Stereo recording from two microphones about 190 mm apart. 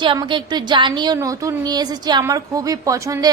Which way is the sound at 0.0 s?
25° right (ahead or behind).